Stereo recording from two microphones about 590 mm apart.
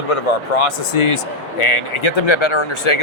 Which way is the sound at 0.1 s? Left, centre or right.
Left.